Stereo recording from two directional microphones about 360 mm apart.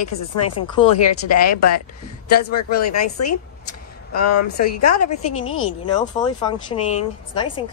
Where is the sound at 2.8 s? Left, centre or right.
Left.